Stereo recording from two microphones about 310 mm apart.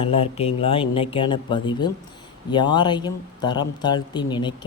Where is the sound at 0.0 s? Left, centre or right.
Centre.